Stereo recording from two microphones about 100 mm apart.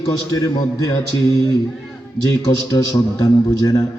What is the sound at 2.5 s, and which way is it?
A man's voice, 35° left (ahead or behind).